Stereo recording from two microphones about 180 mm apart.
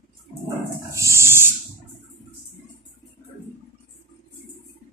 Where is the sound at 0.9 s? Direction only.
15° right (ahead or behind).